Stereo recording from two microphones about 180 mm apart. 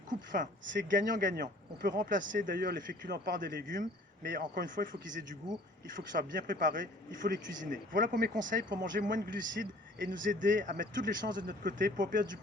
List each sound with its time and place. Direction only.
0.1 s speech: 45° right (ahead or behind)